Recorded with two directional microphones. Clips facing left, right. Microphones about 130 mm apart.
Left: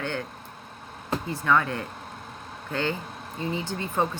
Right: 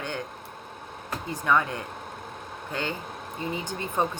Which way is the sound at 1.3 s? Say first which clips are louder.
Even; 15° right (ahead or behind).